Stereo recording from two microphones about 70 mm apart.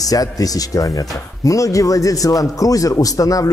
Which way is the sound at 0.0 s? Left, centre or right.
Left.